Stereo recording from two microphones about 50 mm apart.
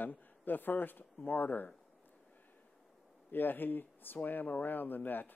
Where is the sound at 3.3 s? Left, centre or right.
Left.